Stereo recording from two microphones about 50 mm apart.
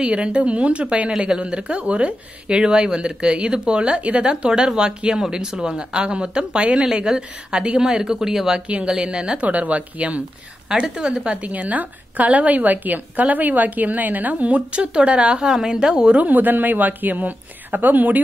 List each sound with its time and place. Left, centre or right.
0.0 s speech: right
9.5 s speech: right
16.3 s a woman's voice: right